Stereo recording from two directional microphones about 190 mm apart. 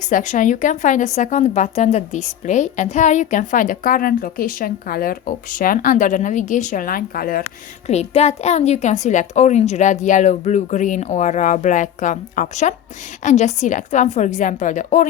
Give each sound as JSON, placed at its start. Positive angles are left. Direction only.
{"t": 0.1, "sound": "a woman's voice", "side_deg": 40}
{"t": 7.9, "sound": "a woman's voice", "side_deg": 35}